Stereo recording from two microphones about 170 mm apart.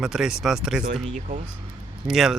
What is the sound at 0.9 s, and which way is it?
Speech, 45° right (ahead or behind).